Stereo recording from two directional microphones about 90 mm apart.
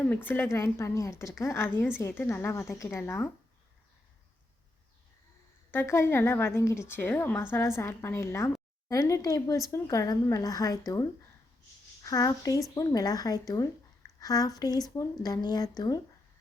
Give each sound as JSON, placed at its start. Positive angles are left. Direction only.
{"t": 0.0, "sound": "a woman's voice", "side_deg": 20}
{"t": 0.4, "sound": "a woman's voice", "side_deg": 35}
{"t": 5.7, "sound": "a woman's voice", "side_deg": 30}
{"t": 12.0, "sound": "speech", "side_deg": 40}